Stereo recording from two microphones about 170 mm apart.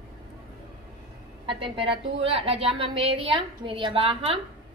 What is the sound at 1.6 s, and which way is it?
A woman's voice, 30° right (ahead or behind).